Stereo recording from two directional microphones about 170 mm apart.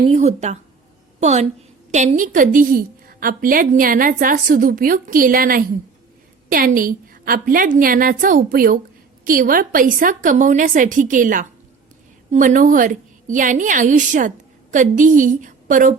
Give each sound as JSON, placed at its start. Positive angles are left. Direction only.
{"t": 0.1, "sound": "a woman's voice", "side_deg": -40}